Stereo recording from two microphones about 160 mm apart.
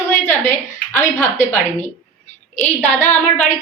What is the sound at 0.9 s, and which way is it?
Speech, 15° left (ahead or behind).